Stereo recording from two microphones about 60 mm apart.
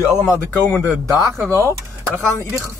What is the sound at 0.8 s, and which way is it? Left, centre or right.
Speech, right.